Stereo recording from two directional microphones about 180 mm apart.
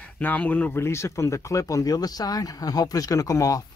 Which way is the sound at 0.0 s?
10° left (ahead or behind).